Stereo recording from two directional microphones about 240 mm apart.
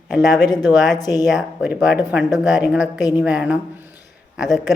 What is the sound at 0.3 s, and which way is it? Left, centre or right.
Speech, centre.